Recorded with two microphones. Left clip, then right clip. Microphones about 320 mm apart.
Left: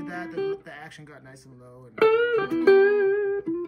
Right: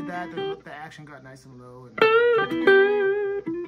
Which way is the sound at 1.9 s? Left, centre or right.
Right.